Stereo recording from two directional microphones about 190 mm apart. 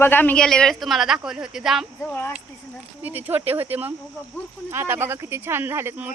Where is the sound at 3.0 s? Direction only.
10° right (ahead or behind).